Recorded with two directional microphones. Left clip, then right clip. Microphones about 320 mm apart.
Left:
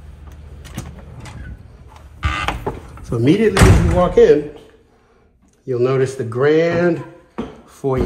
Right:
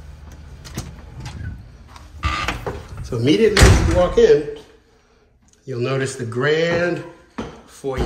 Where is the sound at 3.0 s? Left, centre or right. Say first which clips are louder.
Even; centre.